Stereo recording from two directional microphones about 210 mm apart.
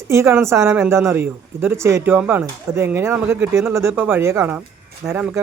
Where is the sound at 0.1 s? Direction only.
10° right (ahead or behind).